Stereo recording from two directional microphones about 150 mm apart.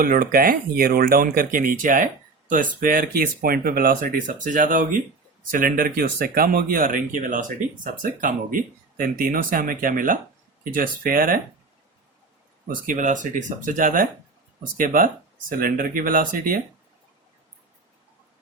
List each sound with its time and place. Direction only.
0.0 s speech: 70° right (ahead or behind)
12.6 s speech: 65° right (ahead or behind)